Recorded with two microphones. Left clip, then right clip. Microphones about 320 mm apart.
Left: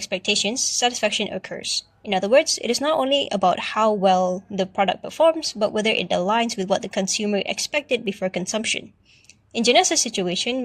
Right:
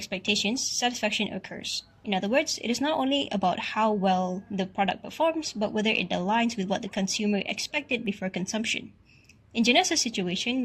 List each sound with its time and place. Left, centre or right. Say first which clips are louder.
0.0 s speech: left 5 dB; left